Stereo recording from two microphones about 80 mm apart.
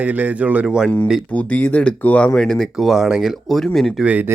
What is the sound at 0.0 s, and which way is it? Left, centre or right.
Speech, centre.